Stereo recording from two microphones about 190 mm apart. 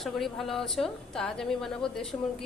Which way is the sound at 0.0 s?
Centre (ahead or behind).